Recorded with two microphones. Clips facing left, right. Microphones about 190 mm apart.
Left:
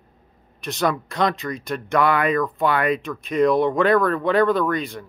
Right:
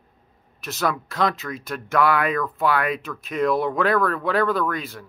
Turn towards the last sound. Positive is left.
turn(degrees=-5)  # may be behind; listen again after turning